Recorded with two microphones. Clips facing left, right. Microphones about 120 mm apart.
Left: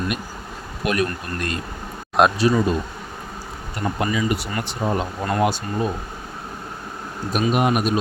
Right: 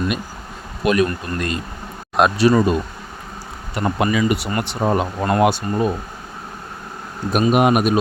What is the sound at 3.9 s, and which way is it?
Speech, 75° right (ahead or behind).